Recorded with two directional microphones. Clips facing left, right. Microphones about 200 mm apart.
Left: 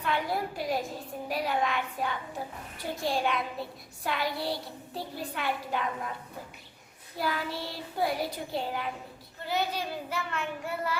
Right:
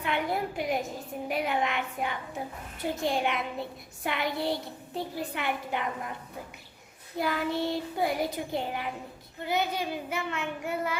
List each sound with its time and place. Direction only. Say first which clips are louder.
0.0 s a woman's voice: right 1 dB; 20° right (ahead or behind)
7.2 s a woman's voice: right 4 dB; 20° right (ahead or behind)